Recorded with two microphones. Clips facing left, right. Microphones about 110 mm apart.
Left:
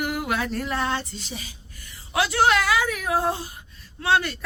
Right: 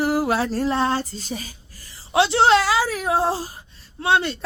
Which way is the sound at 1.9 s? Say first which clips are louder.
Right 6 dB; 30° right (ahead or behind).